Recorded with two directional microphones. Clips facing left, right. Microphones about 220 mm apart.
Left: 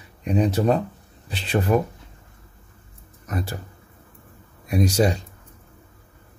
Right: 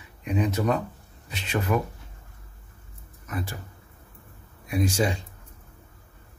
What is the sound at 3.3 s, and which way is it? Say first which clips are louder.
Speech: left 4 dB; 40° left (ahead or behind).